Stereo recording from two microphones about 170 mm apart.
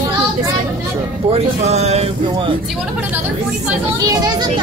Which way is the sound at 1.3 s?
40° right (ahead or behind).